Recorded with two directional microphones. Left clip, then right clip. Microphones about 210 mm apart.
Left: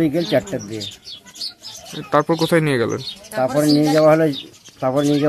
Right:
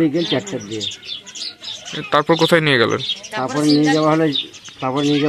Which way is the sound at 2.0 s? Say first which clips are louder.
Right 3 dB; 5° left (ahead or behind).